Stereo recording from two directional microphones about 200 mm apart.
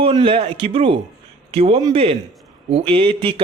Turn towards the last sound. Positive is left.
turn(degrees=-25)  # may be behind; listen again after turning